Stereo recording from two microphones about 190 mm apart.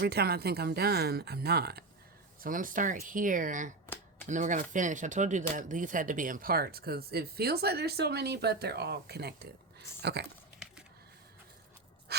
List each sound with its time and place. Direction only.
0.0 s speech: 55° right (ahead or behind)
2.4 s speech: 45° right (ahead or behind); by 10.2 s 60° right (ahead or behind)